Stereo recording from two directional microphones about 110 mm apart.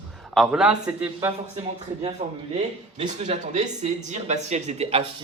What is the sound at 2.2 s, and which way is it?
Speech, 55° right (ahead or behind).